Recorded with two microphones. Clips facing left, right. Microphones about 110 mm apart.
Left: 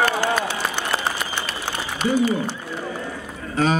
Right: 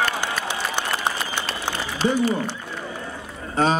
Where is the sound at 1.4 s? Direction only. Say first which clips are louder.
Right 1 dB; 30° right (ahead or behind).